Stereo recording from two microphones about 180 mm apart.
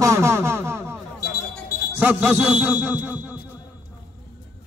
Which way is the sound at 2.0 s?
10° right (ahead or behind).